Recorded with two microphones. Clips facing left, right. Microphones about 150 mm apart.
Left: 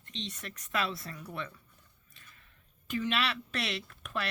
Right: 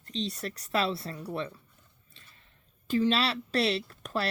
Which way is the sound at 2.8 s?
30° right (ahead or behind).